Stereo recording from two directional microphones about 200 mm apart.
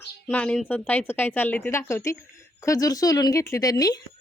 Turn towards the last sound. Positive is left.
turn(degrees=20)  # may be behind; listen again after turning